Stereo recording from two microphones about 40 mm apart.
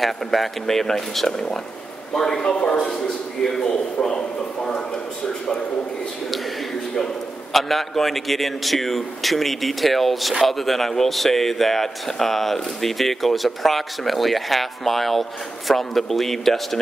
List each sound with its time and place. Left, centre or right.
0.0 s speech: centre
2.5 s speech: left
3.4 s speech: centre
7.5 s a man's voice: centre